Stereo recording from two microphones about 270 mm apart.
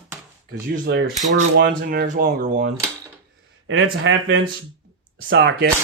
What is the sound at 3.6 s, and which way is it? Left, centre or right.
Speech, right.